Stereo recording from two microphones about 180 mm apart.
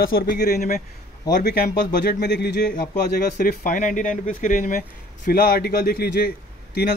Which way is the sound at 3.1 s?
50° left (ahead or behind).